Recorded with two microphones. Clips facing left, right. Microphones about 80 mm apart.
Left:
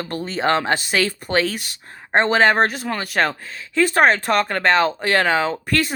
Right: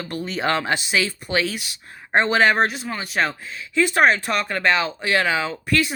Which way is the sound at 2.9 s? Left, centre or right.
Left.